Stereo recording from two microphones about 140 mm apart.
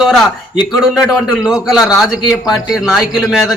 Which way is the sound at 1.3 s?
5° right (ahead or behind).